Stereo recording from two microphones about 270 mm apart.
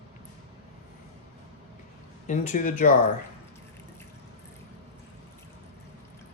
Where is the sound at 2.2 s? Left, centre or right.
Left.